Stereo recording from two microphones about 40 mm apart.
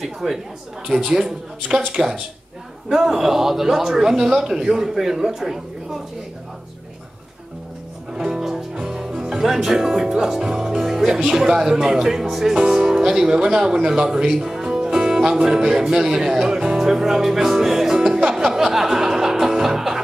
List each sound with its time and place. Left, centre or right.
0.0 s a man's voice: centre
8.1 s music: centre
9.4 s speech: centre
12.5 s speech: centre
18.0 s music: right
18.3 s music: centre